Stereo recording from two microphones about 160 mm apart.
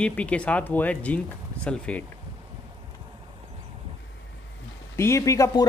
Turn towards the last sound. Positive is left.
turn(degrees=20)  # may be behind; listen again after turning